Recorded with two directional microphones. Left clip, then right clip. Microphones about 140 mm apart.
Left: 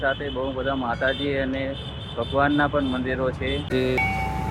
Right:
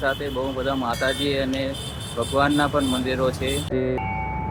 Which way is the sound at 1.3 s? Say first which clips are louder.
Right 1 dB; 30° right (ahead or behind).